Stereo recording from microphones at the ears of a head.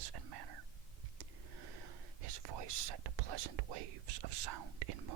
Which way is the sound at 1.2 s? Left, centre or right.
Right.